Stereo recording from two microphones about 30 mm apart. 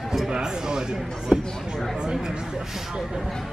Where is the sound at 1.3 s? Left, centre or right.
Right.